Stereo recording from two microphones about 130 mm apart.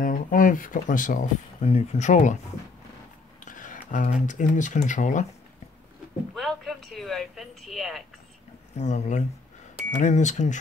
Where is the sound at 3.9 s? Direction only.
80° left.